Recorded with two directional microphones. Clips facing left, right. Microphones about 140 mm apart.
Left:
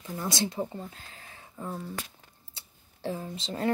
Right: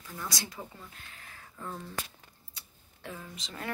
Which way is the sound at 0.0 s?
30° left (ahead or behind).